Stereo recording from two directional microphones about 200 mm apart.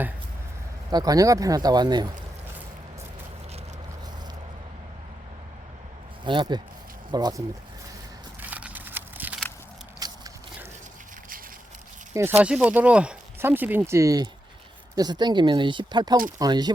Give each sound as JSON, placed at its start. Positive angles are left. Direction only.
{"t": 0.9, "sound": "speech", "side_deg": -20}
{"t": 6.2, "sound": "speech", "side_deg": -20}
{"t": 8.4, "sound": "a sound", "side_deg": -5}
{"t": 10.0, "sound": "biting", "side_deg": -15}
{"t": 12.4, "sound": "speech", "side_deg": -5}